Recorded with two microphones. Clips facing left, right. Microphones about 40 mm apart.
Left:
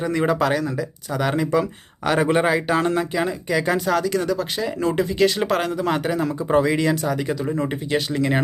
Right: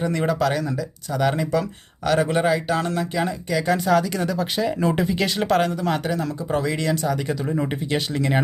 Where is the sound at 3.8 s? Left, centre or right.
Centre.